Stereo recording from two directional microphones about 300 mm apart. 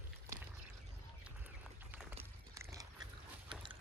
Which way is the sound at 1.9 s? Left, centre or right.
Centre.